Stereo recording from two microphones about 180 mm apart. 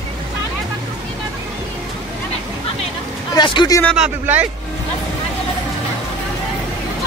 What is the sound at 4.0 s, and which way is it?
Speech, 10° right (ahead or behind).